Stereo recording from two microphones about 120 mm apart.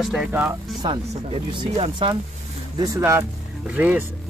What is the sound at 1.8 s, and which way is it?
Speech, 45° right (ahead or behind).